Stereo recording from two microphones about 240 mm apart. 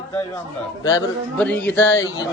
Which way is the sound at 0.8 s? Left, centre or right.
Centre.